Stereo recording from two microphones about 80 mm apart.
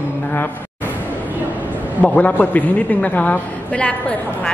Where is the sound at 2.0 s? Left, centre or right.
Centre.